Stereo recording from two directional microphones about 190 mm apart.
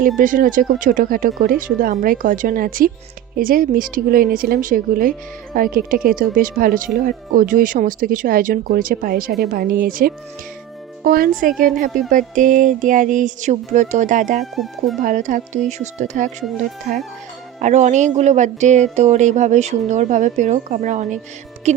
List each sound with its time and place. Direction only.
0.2 s a woman's voice: 45° right (ahead or behind)
14.5 s speech: centre (ahead or behind)
15.0 s speech: 40° right (ahead or behind)
16.4 s speech: centre (ahead or behind)
17.6 s speech: 35° right (ahead or behind)